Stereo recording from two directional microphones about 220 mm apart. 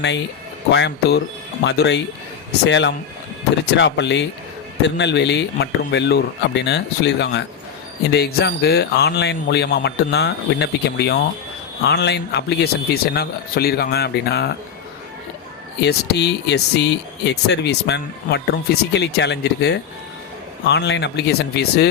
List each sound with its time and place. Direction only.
0.7 s a man's voice: 50° left (ahead or behind)
15.8 s a man's voice: 50° left (ahead or behind)